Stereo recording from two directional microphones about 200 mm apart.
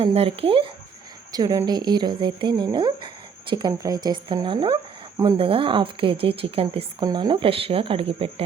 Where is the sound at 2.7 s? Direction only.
25° right (ahead or behind).